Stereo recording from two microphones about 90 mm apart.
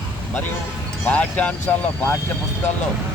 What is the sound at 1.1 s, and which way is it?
Speech, 15° left (ahead or behind).